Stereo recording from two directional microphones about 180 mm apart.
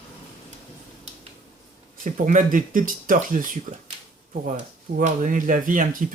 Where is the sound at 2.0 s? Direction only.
45° right (ahead or behind).